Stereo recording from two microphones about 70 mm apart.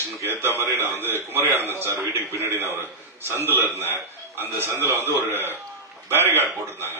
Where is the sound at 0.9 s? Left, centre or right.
Left.